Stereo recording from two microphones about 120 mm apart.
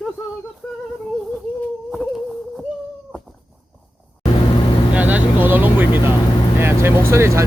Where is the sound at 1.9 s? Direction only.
Centre (ahead or behind).